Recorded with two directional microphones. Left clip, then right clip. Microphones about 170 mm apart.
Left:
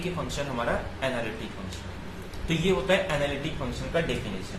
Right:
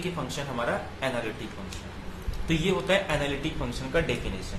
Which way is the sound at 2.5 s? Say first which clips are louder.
Left 1 dB; 30° right (ahead or behind).